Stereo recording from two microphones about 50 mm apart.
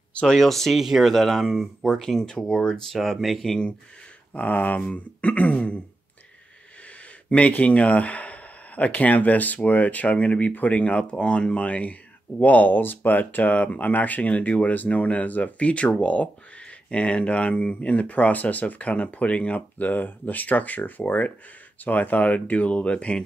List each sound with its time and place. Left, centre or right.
0.1 s a sound: centre
0.4 s speech: centre
0.7 s speech: centre
1.9 s speech: centre
4.3 s speech: left
7.2 s speech: left